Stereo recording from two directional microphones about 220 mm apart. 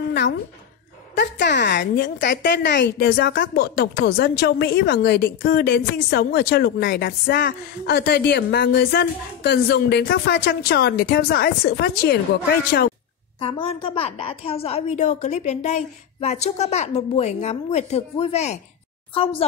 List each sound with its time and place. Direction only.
0.1 s speech: 50° left (ahead or behind)
13.4 s a woman's voice: 25° left (ahead or behind)